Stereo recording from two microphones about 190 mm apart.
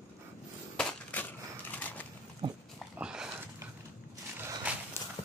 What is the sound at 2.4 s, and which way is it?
Dog, 25° right (ahead or behind).